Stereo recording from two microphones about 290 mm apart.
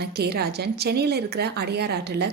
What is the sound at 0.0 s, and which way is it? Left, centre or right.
A woman's voice, right.